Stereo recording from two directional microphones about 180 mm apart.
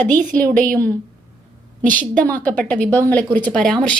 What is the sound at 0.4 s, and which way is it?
Speech, 50° right (ahead or behind).